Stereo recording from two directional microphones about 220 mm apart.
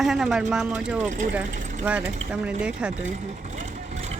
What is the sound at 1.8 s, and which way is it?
Speech, 5° right (ahead or behind).